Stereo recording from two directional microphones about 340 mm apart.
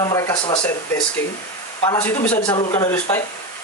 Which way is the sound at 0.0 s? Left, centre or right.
Centre.